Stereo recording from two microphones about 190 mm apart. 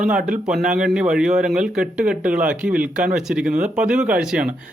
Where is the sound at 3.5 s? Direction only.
40° right (ahead or behind).